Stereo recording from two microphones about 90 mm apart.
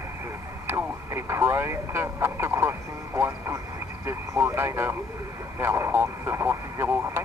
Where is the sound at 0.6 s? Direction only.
30° right (ahead or behind).